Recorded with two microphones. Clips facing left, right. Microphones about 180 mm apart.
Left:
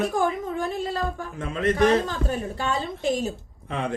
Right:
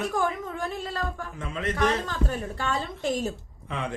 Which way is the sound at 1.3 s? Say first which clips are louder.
Left 8 dB; 50° left (ahead or behind).